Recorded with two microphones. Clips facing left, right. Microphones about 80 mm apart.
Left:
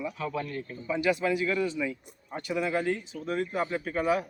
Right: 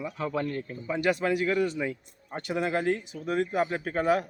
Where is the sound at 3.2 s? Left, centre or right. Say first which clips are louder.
Right 3 dB; right.